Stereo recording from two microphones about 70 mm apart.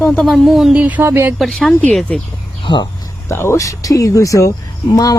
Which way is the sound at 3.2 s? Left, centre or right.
Left.